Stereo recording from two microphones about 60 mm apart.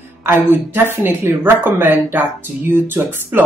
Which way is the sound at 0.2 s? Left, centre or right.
Right.